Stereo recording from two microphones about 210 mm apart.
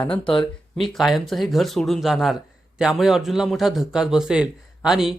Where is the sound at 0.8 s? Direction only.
Centre (ahead or behind).